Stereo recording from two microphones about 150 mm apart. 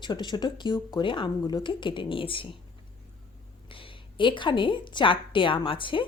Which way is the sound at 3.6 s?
35° left (ahead or behind).